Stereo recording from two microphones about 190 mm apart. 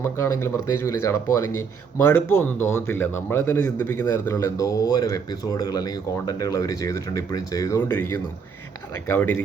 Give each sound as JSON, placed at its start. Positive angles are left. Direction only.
{"t": 0.0, "sound": "a man's voice", "side_deg": 15}